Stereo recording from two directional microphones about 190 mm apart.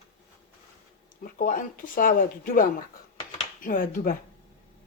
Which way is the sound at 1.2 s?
45° left (ahead or behind).